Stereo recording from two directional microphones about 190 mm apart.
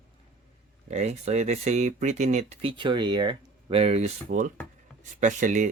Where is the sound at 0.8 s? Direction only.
35° right (ahead or behind).